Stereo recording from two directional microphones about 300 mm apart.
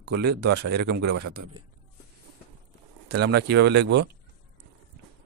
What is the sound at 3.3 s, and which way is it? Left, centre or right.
Speech, right.